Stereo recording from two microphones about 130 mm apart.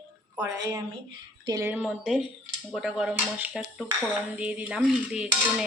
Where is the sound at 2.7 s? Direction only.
5° right (ahead or behind).